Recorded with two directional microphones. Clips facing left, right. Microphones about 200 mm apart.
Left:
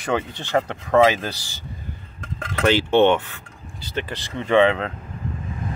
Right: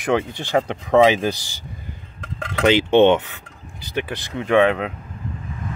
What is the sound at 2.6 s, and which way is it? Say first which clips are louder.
Speech: right 3 dB; 15° right (ahead or behind).